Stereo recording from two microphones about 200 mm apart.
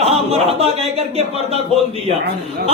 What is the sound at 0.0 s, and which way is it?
Speech, 30° right (ahead or behind).